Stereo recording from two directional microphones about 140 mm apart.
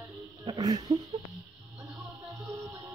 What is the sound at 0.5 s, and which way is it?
Speech, 25° right (ahead or behind).